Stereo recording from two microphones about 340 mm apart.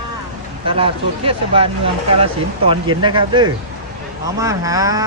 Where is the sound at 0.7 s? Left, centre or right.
Centre.